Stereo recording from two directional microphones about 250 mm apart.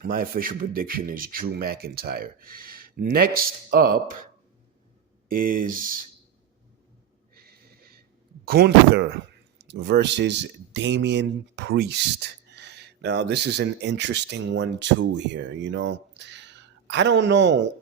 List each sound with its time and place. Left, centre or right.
0.0 s speech: right
5.3 s speech: right
7.3 s a sound: right
8.4 s speech: right